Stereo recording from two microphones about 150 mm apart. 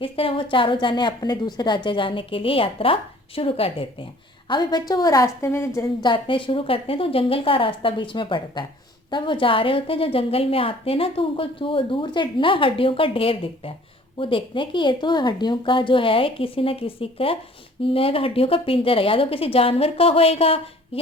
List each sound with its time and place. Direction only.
0.0 s a woman's voice: 35° left (ahead or behind); by 6.1 s 20° left (ahead or behind)
6.1 s a woman's voice: 35° left (ahead or behind)